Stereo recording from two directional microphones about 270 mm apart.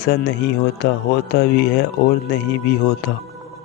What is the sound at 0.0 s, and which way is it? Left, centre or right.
Speech, left.